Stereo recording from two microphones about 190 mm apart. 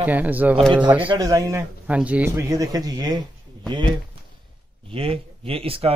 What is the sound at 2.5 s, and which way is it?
Speech, 20° right (ahead or behind).